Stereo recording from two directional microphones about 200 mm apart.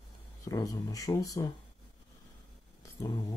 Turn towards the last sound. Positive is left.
turn(degrees=15)  # may be behind; listen again after turning